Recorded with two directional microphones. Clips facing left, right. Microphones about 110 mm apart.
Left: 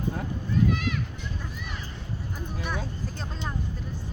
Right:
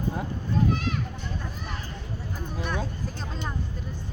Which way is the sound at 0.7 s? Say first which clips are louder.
Even; 35° right (ahead or behind).